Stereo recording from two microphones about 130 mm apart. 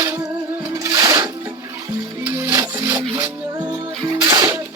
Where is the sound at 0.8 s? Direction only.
25° right (ahead or behind).